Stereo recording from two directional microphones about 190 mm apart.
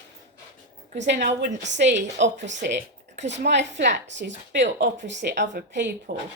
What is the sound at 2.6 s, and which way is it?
Speech, 70° right (ahead or behind).